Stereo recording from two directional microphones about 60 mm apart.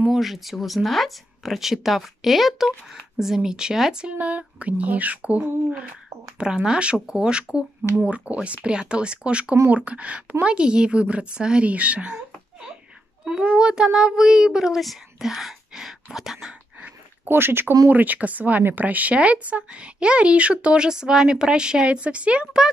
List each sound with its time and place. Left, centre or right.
0.1 s a child's voice: centre; by 12.2 s right
13.2 s a child's voice: centre
16.8 s a sound: right
17.8 s speech: right